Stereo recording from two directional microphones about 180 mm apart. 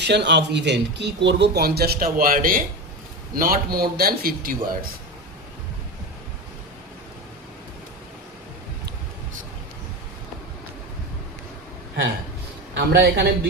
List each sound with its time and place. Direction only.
0.0 s a man's voice: 70° right (ahead or behind); by 4.9 s 55° right (ahead or behind)
12.7 s speech: 65° right (ahead or behind)